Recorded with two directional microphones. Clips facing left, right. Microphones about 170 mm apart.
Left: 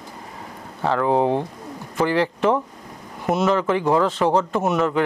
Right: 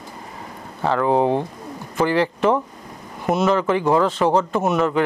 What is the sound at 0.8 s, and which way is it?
Speech, 15° right (ahead or behind).